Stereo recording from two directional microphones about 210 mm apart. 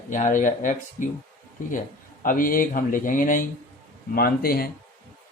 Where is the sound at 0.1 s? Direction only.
35° left (ahead or behind).